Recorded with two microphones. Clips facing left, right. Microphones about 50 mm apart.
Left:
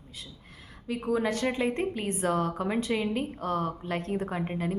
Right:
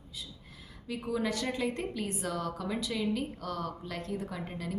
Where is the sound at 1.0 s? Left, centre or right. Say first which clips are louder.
Left 5 dB; left.